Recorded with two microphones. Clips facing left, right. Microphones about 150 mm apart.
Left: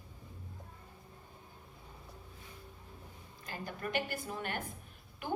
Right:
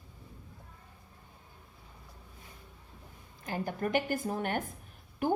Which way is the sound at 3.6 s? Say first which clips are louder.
Right 6 dB; 45° right (ahead or behind).